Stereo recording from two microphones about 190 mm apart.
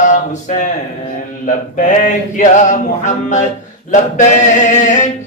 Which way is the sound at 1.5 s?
40° left (ahead or behind).